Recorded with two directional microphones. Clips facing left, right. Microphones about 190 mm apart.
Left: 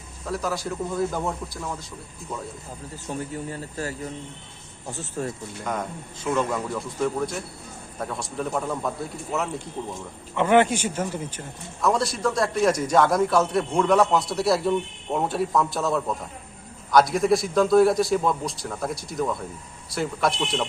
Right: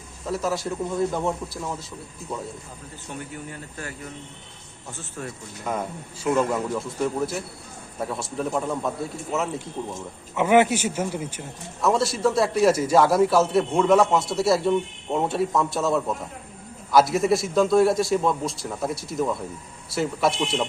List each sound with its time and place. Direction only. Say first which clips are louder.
0.3 s speech: right 2 dB; centre (ahead or behind)
3.1 s speech: left 5 dB; 35° left (ahead or behind)
5.6 s speech: right 2 dB; 5° right (ahead or behind)
10.3 s speech: right 1 dB; 10° right (ahead or behind)